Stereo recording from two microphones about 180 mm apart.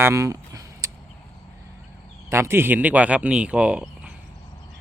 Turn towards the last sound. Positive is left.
turn(degrees=-5)  # may be behind; listen again after turning